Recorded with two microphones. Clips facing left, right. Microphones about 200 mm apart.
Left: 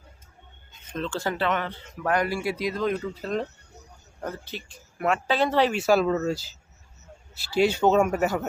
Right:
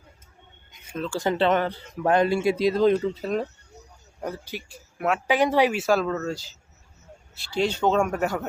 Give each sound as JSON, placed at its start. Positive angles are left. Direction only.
{"t": 0.7, "sound": "a sound", "side_deg": -10}
{"t": 1.2, "sound": "a man's voice", "side_deg": -20}
{"t": 1.5, "sound": "a man's voice", "side_deg": -35}
{"t": 3.2, "sound": "speech", "side_deg": -10}
{"t": 5.8, "sound": "speech", "side_deg": 5}